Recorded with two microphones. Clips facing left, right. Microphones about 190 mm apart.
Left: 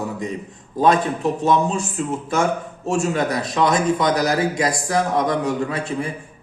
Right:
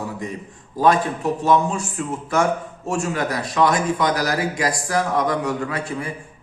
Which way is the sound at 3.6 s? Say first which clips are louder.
Left 2 dB; 20° left (ahead or behind).